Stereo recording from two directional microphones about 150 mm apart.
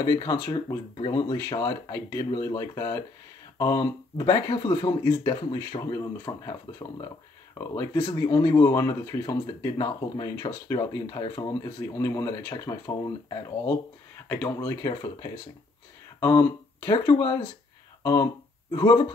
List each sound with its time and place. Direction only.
0.0 s speech: 25° left (ahead or behind)
0.9 s speech: 35° left (ahead or behind)
1.3 s speech: 20° left (ahead or behind)